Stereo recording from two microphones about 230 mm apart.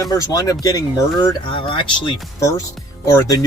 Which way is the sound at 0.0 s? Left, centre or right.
Centre.